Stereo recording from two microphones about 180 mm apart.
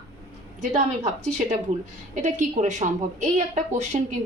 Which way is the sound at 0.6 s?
40° right (ahead or behind).